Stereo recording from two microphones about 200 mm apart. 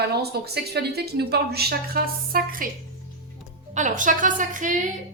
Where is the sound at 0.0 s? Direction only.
55° right (ahead or behind).